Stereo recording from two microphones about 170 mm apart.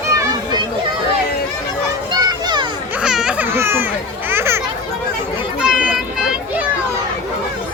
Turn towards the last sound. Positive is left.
turn(degrees=-5)  # may be behind; listen again after turning